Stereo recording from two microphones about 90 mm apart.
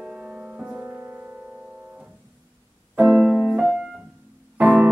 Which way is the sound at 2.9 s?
15° right (ahead or behind).